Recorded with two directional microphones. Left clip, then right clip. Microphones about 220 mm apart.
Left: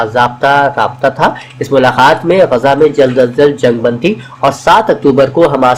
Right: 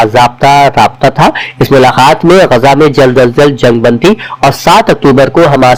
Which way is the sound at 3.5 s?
40° right (ahead or behind).